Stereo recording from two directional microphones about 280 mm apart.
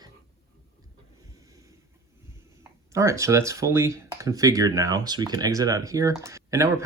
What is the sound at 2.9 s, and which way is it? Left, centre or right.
Speech, centre.